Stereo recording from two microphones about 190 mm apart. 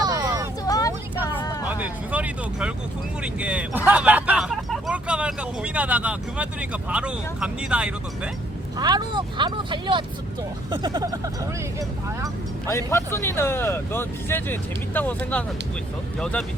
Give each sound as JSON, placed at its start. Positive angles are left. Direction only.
{"t": 0.0, "sound": "vehicle", "side_deg": -20}
{"t": 0.7, "sound": "vehicle", "side_deg": 20}
{"t": 1.6, "sound": "vehicle", "side_deg": -10}
{"t": 3.4, "sound": "speech", "side_deg": -5}
{"t": 8.8, "sound": "speech", "side_deg": -20}
{"t": 12.6, "sound": "speech", "side_deg": 15}